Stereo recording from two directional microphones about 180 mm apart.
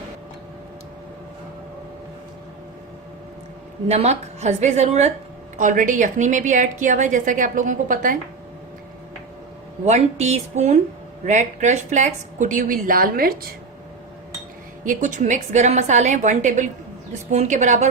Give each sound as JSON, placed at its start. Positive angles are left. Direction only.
{"t": 3.8, "sound": "a woman's voice", "side_deg": -35}
{"t": 9.8, "sound": "a woman's voice", "side_deg": -40}
{"t": 14.8, "sound": "a woman's voice", "side_deg": -45}